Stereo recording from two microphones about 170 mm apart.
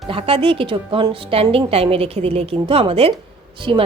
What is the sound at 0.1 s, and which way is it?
A woman's voice, 35° right (ahead or behind).